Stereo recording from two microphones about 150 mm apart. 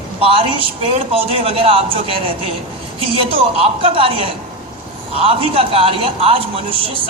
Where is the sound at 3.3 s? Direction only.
40° right (ahead or behind).